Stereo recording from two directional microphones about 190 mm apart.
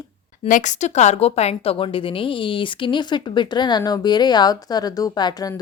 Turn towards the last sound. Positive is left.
turn(degrees=20)  # may be behind; listen again after turning